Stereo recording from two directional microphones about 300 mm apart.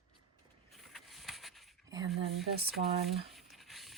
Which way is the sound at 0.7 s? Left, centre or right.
Centre.